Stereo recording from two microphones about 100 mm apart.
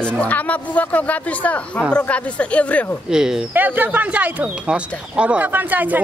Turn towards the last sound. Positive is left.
turn(degrees=-15)  # may be behind; listen again after turning